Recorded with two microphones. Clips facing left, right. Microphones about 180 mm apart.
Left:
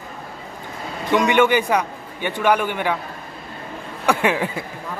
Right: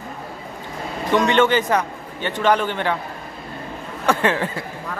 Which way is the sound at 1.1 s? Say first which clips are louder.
Even; 10° left (ahead or behind).